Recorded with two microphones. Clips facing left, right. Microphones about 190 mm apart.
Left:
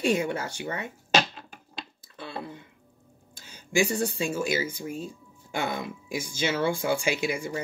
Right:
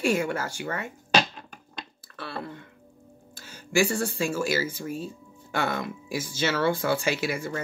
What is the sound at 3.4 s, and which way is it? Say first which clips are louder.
Speech: right 1 dB; 15° left (ahead or behind).